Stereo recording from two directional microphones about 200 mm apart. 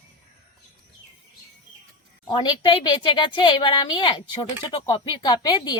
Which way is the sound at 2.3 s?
20° left (ahead or behind).